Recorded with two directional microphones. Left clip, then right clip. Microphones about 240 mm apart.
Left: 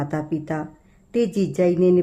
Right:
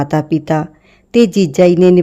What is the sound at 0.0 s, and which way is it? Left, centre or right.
Speech, right.